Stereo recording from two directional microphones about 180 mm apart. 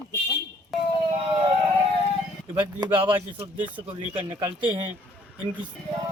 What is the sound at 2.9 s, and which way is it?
Speech, 25° right (ahead or behind).